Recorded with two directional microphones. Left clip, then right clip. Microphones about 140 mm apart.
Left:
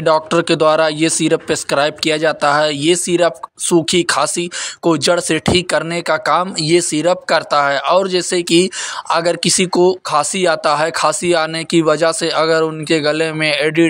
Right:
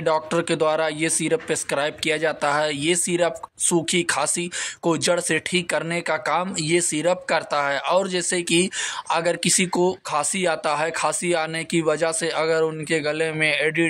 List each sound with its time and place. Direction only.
0.0 s speech: 30° left (ahead or behind)